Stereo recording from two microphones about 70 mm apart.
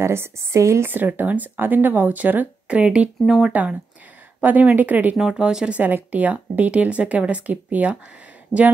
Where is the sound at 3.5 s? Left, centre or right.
Right.